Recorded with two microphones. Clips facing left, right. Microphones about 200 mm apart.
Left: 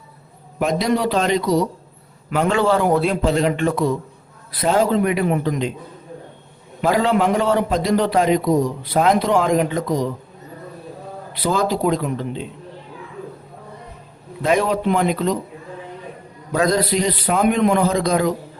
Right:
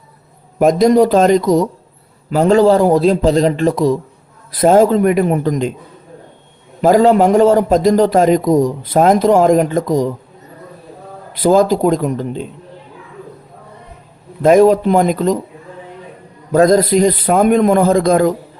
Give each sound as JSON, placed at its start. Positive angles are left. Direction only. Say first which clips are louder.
{"t": 0.6, "sound": "a man's voice", "louder": "right 9 dB", "side_deg": -45}
{"t": 6.8, "sound": "a man's voice", "louder": "right 8 dB", "side_deg": -45}
{"t": 11.3, "sound": "a man's voice", "louder": "right 9 dB", "side_deg": -45}
{"t": 14.4, "sound": "a man's voice", "louder": "right 9 dB", "side_deg": -45}
{"t": 16.5, "sound": "a man's voice", "louder": "right 8 dB", "side_deg": -45}